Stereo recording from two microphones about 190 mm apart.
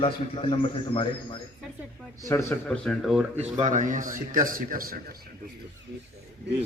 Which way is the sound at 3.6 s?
40° right (ahead or behind).